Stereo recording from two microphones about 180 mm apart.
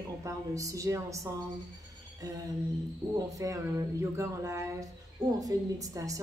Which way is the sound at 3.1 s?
20° right (ahead or behind).